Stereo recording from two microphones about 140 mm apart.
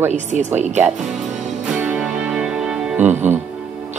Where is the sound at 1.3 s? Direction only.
55° right (ahead or behind).